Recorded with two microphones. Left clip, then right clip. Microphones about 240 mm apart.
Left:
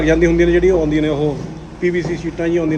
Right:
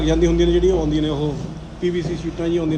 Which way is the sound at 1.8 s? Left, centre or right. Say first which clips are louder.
Left 4 dB; centre.